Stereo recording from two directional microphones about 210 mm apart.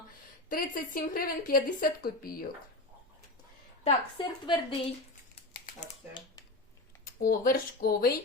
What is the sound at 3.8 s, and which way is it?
Speech, 25° left (ahead or behind).